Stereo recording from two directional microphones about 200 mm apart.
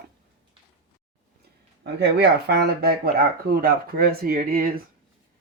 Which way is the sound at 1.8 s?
55° right (ahead or behind).